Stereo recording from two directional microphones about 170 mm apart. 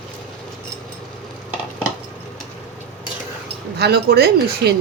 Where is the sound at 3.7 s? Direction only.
70° right (ahead or behind).